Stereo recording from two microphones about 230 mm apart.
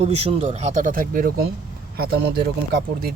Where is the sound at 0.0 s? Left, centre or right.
Right.